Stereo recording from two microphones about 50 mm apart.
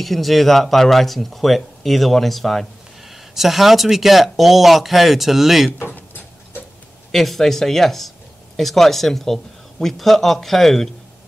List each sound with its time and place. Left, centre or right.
0.0 s speech: centre
5.9 s tick-tock: left
7.1 s speech: centre